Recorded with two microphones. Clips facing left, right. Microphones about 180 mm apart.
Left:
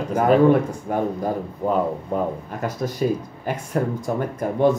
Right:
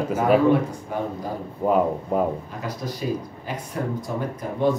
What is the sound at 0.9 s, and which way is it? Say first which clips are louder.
Speech: left 5 dB; 50° left (ahead or behind).